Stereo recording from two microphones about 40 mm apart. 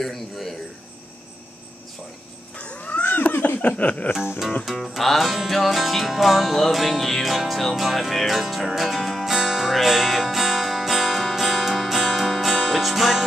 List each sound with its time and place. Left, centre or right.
0.0 s music: centre
2.5 s cat: left
3.3 s a sound: left
3.6 s music: left
4.7 s music: centre